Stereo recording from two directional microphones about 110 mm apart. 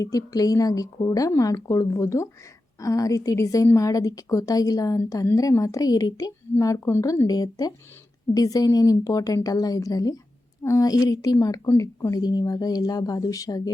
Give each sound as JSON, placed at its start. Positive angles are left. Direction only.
{"t": 0.0, "sound": "a woman's voice", "side_deg": 30}